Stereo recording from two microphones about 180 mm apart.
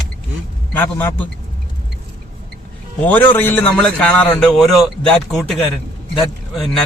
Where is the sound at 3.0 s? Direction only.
10° left (ahead or behind).